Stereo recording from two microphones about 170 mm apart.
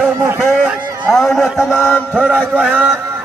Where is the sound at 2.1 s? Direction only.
5° right (ahead or behind).